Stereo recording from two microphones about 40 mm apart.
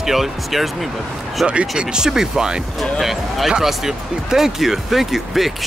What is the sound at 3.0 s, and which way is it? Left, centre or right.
Speech, centre.